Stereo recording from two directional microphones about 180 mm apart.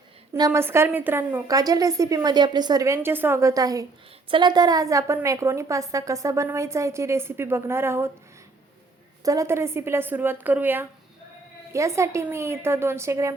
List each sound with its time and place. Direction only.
0.3 s a woman's voice: 15° right (ahead or behind)
9.2 s a woman's voice: 20° right (ahead or behind)